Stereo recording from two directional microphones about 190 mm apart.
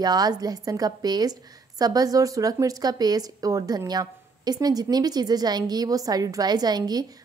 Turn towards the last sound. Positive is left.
turn(degrees=-20)  # may be behind; listen again after turning